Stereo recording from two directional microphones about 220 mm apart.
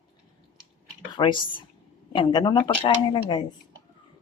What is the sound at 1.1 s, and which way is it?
A woman's voice, 20° left (ahead or behind).